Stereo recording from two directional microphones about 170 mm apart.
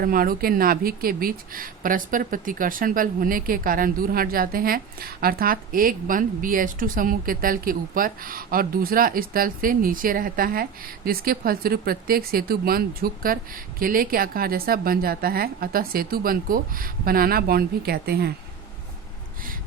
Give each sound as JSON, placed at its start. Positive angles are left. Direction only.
{"t": 0.0, "sound": "a woman's voice", "side_deg": -55}